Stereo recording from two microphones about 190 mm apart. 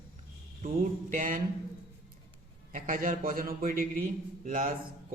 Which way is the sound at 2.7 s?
45° right (ahead or behind).